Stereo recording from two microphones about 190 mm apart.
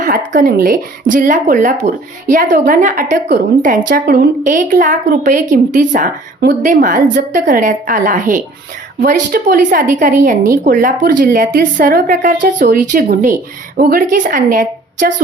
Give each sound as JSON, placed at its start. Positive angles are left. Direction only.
{"t": 0.3, "sound": "speech", "side_deg": -45}